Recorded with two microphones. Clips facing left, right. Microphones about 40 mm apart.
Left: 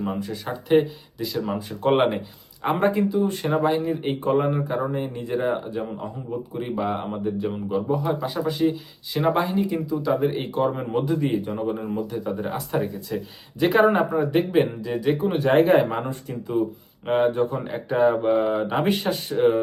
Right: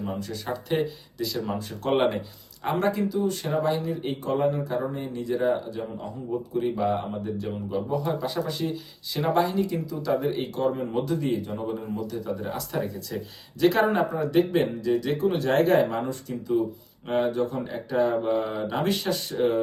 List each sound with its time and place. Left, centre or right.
0.0 s speech: left
6.5 s speech: centre